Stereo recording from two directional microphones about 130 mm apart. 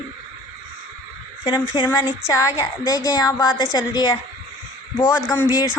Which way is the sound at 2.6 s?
30° left (ahead or behind).